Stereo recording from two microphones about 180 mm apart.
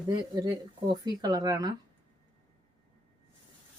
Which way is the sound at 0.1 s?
20° right (ahead or behind).